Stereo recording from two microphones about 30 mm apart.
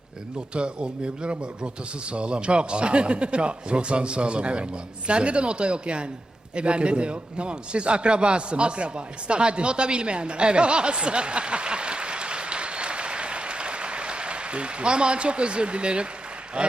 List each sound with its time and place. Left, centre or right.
0.5 s a man's voice: right